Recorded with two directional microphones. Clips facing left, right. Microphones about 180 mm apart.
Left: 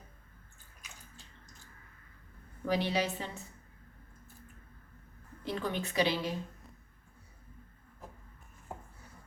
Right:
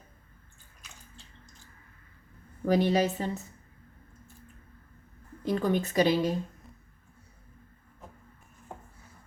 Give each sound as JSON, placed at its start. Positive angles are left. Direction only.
{"t": 2.6, "sound": "a woman's voice", "side_deg": -45}
{"t": 5.5, "sound": "a woman's voice", "side_deg": -45}